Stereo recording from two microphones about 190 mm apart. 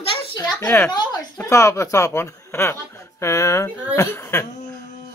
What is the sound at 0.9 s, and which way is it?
Speech, 15° left (ahead or behind).